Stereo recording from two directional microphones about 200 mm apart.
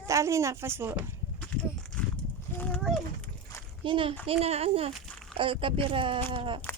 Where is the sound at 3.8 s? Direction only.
25° right (ahead or behind).